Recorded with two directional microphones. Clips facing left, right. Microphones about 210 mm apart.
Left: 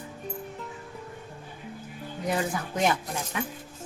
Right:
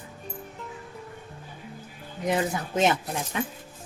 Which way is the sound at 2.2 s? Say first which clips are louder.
Right 3 dB; 20° right (ahead or behind).